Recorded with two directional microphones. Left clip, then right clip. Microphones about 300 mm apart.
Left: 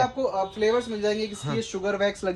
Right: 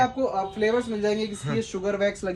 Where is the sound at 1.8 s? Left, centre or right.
Centre.